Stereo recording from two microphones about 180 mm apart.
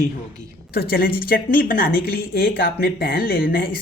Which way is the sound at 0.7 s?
55° left (ahead or behind).